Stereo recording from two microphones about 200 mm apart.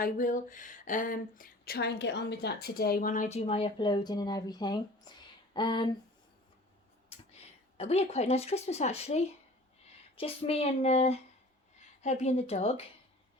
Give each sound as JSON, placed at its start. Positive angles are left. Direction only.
{"t": 0.0, "sound": "speech", "side_deg": 40}
{"t": 7.1, "sound": "a sound", "side_deg": 30}
{"t": 7.8, "sound": "speech", "side_deg": 30}